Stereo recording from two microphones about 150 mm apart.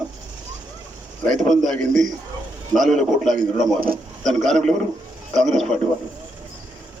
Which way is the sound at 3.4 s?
75° right (ahead or behind).